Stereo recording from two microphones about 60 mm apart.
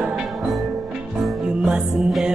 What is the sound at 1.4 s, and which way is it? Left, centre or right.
Music, centre.